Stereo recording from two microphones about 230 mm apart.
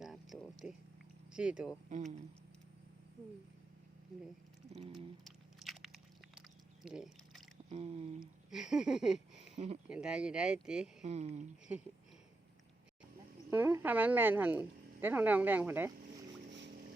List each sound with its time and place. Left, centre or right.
0.0 s a sound: centre
1.3 s speech: centre
1.9 s speech: right
5.2 s biting: centre
6.8 s a sound: centre
7.7 s a sound: right
8.4 s speech: centre
9.6 s speech: right
9.9 s speech: centre
11.0 s speech: right
13.5 s speech: centre